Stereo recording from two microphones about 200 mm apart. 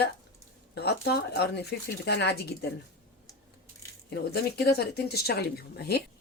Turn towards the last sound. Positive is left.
turn(degrees=55)  # may be behind; listen again after turning